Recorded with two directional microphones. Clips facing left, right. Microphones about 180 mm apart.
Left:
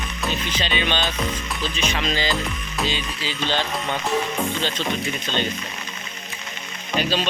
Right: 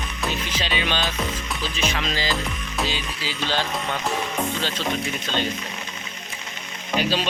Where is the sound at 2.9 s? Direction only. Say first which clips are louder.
Left 2 dB; 5° right (ahead or behind).